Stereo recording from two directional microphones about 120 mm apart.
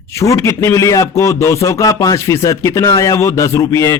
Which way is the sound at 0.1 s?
25° left (ahead or behind).